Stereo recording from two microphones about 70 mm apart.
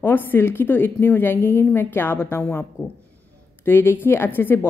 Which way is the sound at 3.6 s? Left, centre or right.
Left.